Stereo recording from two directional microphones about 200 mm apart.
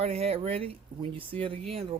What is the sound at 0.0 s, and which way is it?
Speech, 30° right (ahead or behind).